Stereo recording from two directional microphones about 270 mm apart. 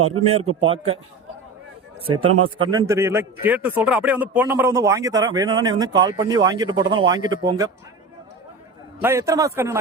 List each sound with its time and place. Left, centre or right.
0.2 s a man's voice: right
2.2 s speech: right
2.6 s a man's voice: centre
9.0 s a man's voice: centre